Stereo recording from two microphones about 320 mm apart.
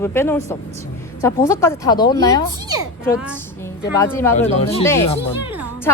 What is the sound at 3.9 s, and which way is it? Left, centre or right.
Speech, centre.